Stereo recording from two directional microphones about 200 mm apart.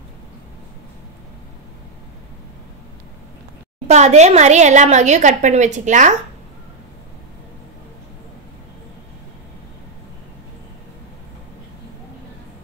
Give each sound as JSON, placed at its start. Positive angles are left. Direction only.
{"t": 3.8, "sound": "a woman's voice", "side_deg": -35}